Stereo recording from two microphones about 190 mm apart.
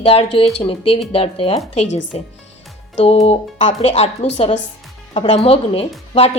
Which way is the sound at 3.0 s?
35° left (ahead or behind).